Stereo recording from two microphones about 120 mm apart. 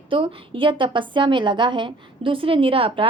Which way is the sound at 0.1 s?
45° right (ahead or behind).